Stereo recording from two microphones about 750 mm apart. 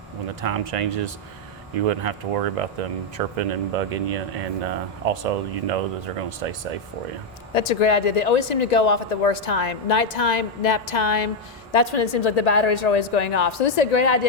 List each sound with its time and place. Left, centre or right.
0.4 s speech: right
7.5 s speech: left